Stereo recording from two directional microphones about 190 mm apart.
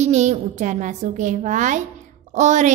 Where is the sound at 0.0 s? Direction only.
35° right (ahead or behind).